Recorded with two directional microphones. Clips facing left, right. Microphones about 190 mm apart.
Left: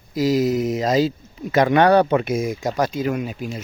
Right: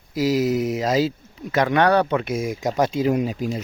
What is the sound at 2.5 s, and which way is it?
Speech, 15° right (ahead or behind).